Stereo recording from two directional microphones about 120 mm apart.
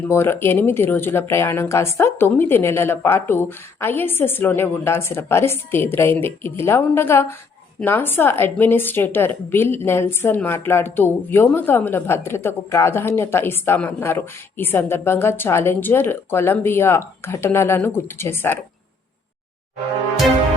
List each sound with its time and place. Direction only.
0.1 s a woman's voice: 20° left (ahead or behind)